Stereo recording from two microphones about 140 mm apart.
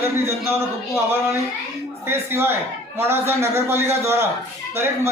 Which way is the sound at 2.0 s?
15° right (ahead or behind).